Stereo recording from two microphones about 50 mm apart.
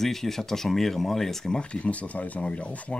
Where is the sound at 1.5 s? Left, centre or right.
Left.